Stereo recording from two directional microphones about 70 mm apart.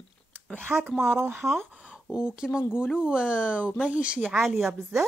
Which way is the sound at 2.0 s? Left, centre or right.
Left.